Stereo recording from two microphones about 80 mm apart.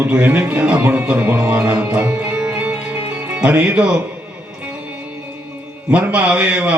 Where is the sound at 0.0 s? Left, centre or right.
Right.